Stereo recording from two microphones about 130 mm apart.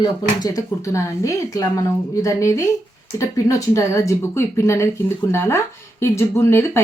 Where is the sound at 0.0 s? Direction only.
30° left (ahead or behind).